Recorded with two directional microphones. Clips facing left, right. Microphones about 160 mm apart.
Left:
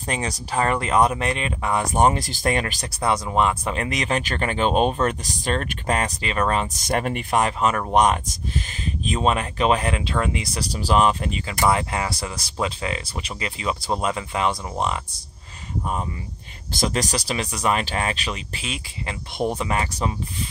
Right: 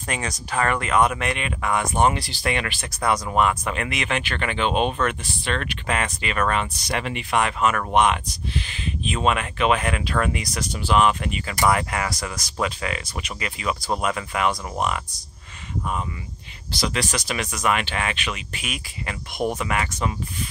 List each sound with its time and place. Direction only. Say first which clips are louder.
0.0 s speech: left 2 dB; 30° left (ahead or behind)
6.8 s speech: left 4 dB; 45° left (ahead or behind); by 15.0 s 30° left (ahead or behind)
16.7 s speech: left 2 dB; 45° left (ahead or behind)